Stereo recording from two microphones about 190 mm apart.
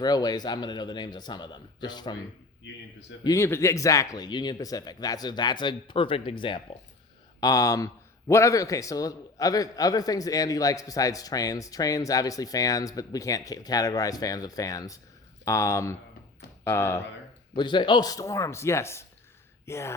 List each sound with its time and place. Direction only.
0.0 s a man's voice: 20° left (ahead or behind)
3.2 s a man's voice: 15° left (ahead or behind)
17.5 s a man's voice: 25° left (ahead or behind)